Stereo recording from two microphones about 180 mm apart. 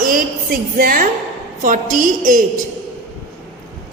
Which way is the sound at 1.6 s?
45° right (ahead or behind).